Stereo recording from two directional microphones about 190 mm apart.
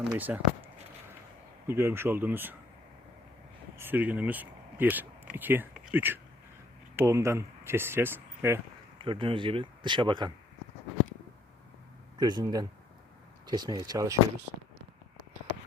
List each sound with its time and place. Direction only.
0.3 s speech: 5° right (ahead or behind)
1.6 s speech: 10° right (ahead or behind)
3.8 s speech: 10° right (ahead or behind)
9.0 s speech: 25° right (ahead or behind)
12.1 s speech: 20° right (ahead or behind)